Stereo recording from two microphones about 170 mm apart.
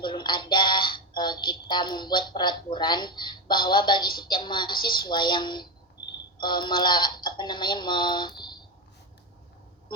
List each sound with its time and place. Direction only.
0.0 s speech: 25° left (ahead or behind)